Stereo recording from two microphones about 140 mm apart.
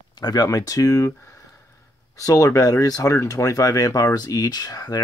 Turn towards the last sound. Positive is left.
turn(degrees=25)  # may be behind; listen again after turning